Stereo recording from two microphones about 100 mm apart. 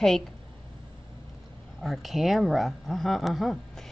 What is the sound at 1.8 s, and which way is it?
Speech, centre (ahead or behind).